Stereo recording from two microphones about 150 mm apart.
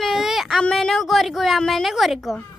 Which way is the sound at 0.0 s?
Centre (ahead or behind).